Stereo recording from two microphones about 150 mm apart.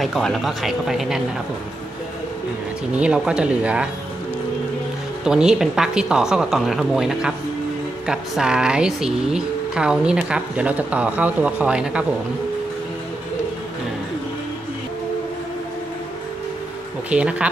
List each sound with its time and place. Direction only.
0.0 s a woman's voice: centre (ahead or behind)
3.0 s speech: 5° right (ahead or behind)
5.2 s a woman's voice: 5° right (ahead or behind)
17.1 s speech: 10° right (ahead or behind)